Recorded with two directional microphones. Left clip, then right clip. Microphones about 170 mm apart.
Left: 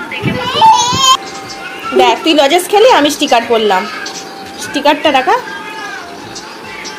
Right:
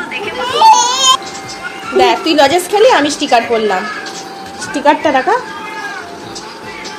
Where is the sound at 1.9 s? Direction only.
20° left (ahead or behind).